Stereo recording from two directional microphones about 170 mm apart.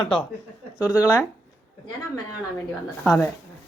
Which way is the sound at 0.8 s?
15° left (ahead or behind).